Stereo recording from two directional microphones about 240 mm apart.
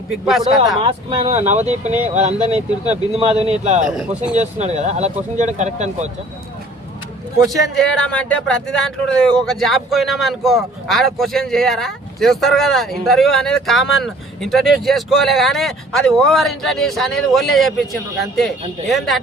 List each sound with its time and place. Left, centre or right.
0.3 s speech: centre
0.8 s speech: right
3.8 s speech: centre
4.4 s speech: right
7.8 s speech: centre